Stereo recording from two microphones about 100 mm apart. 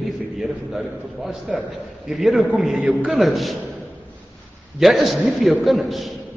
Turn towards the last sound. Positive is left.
turn(degrees=0)  # may be behind; listen again after turning